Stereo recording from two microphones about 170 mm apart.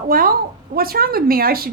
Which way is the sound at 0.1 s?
60° right (ahead or behind).